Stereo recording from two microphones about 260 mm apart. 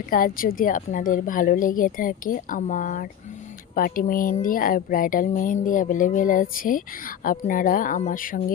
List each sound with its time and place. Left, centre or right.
0.1 s speech: left